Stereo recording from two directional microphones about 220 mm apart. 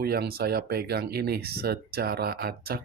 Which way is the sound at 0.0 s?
45° right (ahead or behind).